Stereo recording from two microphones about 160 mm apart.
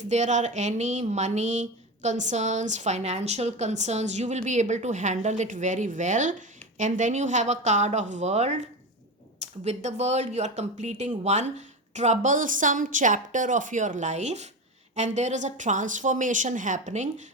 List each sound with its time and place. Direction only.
0.1 s speech: 50° right (ahead or behind)